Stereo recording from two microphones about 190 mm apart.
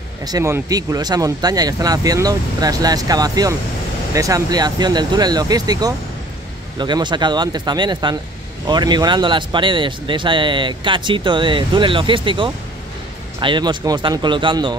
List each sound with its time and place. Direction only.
0.2 s speech: 20° right (ahead or behind)